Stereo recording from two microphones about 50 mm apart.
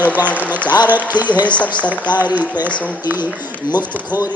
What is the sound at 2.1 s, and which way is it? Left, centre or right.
Speech, right.